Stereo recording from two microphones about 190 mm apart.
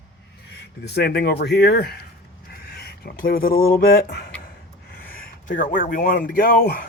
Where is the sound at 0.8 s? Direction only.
60° left (ahead or behind).